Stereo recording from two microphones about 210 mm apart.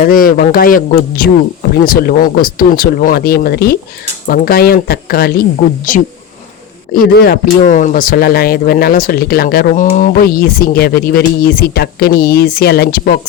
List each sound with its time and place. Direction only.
0.0 s speech: 40° left (ahead or behind)